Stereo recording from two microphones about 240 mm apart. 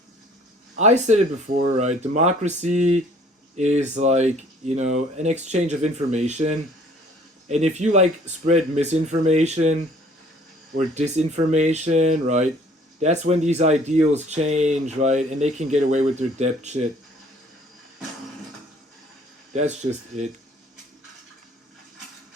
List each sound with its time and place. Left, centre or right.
0.8 s speech: right
10.8 s speech: right
20.1 s speech: right